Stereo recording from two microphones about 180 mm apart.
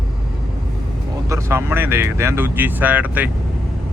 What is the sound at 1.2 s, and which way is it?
Speech, 15° right (ahead or behind).